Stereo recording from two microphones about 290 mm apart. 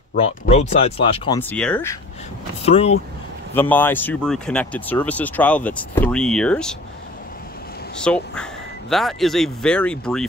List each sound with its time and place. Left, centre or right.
0.1 s speech: left
1.4 s speech: centre
2.6 s speech: left
3.5 s speech: centre
8.0 s speech: centre